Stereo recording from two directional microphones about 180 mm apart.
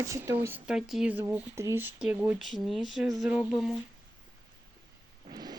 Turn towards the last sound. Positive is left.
turn(degrees=-20)  # may be behind; listen again after turning